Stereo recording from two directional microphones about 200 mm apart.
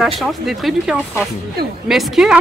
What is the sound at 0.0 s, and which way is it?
A man's voice, centre (ahead or behind).